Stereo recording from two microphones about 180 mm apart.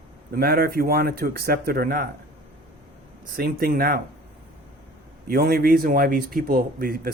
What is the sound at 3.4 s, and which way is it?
Speech, 55° right (ahead or behind).